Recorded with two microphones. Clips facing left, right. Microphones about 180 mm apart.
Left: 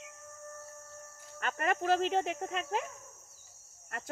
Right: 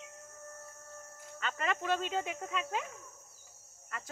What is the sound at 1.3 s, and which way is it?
A woman's voice, 50° left (ahead or behind).